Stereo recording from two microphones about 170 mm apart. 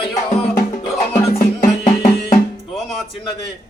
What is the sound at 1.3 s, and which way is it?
Music, 45° left (ahead or behind).